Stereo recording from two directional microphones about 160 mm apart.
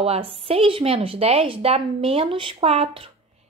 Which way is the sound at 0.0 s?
35° right (ahead or behind).